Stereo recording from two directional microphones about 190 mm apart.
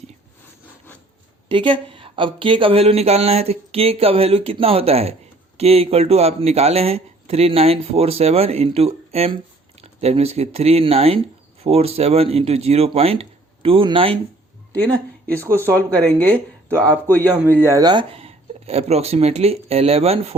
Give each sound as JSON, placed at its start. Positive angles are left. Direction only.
{"t": 1.5, "sound": "speech", "side_deg": -25}
{"t": 15.7, "sound": "speech", "side_deg": 5}
{"t": 17.7, "sound": "speech", "side_deg": -20}